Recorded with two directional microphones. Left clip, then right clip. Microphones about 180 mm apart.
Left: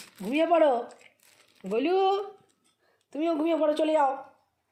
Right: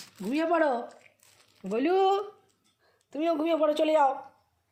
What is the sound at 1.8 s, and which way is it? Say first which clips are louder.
A woman's voice: right 1 dB; 15° right (ahead or behind).